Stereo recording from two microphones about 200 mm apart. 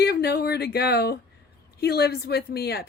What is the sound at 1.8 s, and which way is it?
Speech, 50° left (ahead or behind).